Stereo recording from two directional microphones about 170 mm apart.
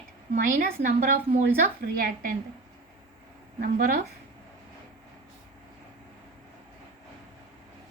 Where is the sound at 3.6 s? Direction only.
65° right (ahead or behind).